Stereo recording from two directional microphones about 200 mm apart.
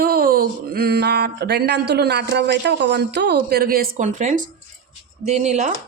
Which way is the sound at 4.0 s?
35° right (ahead or behind).